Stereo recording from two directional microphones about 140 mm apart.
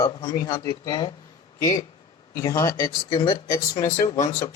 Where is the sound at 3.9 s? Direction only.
60° left (ahead or behind).